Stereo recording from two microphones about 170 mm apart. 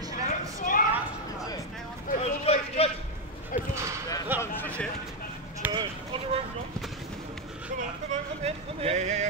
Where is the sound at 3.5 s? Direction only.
50° left (ahead or behind).